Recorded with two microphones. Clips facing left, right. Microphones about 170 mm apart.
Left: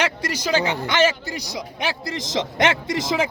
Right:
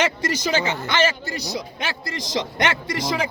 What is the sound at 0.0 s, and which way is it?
Speech, 10° left (ahead or behind).